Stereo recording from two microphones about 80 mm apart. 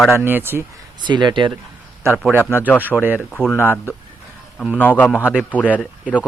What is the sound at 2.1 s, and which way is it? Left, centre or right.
Speech, centre.